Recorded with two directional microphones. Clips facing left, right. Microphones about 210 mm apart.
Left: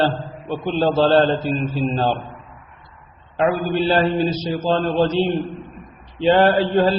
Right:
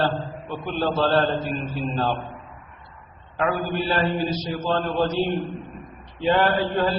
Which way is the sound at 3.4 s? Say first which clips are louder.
Left 5 dB; 25° left (ahead or behind).